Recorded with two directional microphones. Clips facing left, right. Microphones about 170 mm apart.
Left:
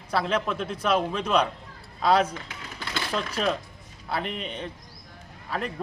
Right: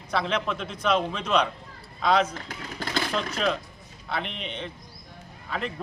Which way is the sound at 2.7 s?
45° right (ahead or behind).